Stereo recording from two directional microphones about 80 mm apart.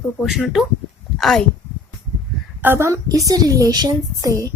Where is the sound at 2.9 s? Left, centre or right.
Right.